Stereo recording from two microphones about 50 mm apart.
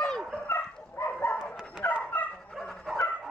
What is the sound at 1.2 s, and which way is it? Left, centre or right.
Dog, left.